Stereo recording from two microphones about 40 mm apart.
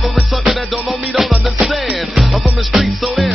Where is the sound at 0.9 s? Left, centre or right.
Centre.